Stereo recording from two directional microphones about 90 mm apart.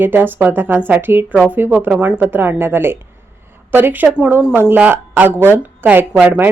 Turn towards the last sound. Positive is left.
turn(degrees=-20)  # may be behind; listen again after turning